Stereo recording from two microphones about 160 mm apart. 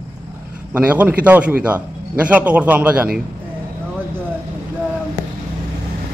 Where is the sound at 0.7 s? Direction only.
10° right (ahead or behind).